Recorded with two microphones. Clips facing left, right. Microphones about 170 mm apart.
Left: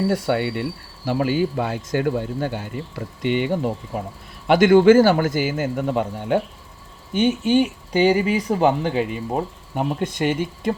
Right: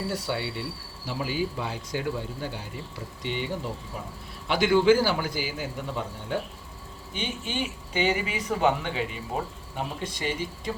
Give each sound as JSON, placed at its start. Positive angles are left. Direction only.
{"t": 0.1, "sound": "speech", "side_deg": 55}
{"t": 3.9, "sound": "speech", "side_deg": 55}
{"t": 7.1, "sound": "speech", "side_deg": 45}